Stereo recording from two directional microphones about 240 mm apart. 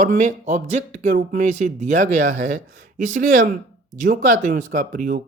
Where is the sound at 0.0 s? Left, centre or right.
Right.